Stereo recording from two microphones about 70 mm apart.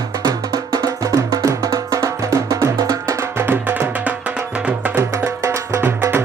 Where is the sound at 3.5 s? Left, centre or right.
Right.